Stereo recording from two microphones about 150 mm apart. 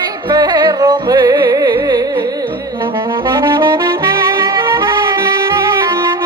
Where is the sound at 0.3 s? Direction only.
30° right (ahead or behind).